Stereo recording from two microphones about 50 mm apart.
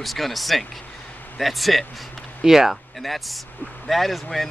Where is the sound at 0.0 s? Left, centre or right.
Centre.